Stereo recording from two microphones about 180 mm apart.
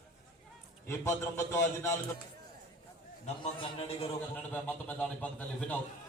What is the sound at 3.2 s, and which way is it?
Speech, 35° left (ahead or behind).